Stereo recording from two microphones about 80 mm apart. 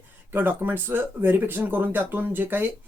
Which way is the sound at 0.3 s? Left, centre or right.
Right.